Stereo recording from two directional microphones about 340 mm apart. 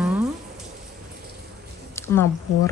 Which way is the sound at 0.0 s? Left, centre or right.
Centre.